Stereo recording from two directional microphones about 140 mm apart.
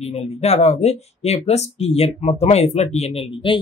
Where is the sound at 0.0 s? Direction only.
50° left (ahead or behind).